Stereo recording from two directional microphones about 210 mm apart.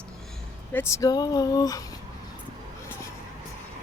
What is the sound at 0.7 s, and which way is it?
Speech, 15° left (ahead or behind).